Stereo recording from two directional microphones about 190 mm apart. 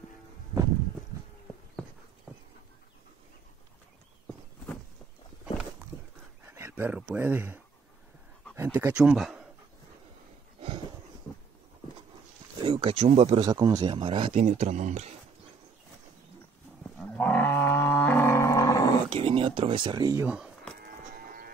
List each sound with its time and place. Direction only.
6.4 s speech: 10° right (ahead or behind)
12.5 s speech: 30° right (ahead or behind)
17.2 s roaring cats: 10° left (ahead or behind)
19.0 s a sound: 30° right (ahead or behind)
20.2 s speech: 5° right (ahead or behind)